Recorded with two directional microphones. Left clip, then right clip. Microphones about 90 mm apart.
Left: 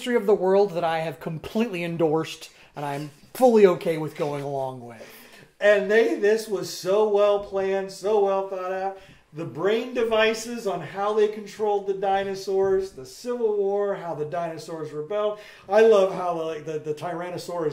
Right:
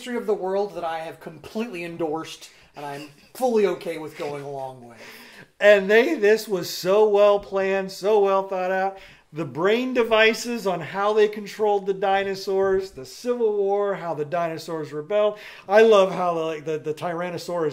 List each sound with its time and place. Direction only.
0.0 s speech: 25° left (ahead or behind)
3.3 s speech: 25° left (ahead or behind)
5.6 s a man's voice: 35° right (ahead or behind)